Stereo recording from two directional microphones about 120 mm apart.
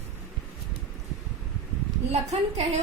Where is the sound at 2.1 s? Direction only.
65° right (ahead or behind).